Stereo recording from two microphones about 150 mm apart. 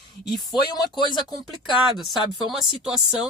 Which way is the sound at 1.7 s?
Centre (ahead or behind).